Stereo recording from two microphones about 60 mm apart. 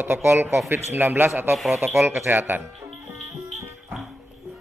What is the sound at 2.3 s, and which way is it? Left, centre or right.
Speech, right.